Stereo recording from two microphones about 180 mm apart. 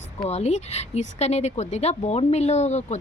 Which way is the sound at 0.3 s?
35° left (ahead or behind).